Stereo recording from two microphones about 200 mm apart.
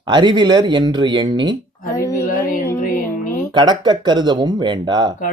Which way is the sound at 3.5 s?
20° right (ahead or behind).